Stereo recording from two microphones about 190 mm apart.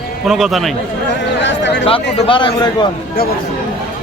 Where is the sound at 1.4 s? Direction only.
70° left (ahead or behind).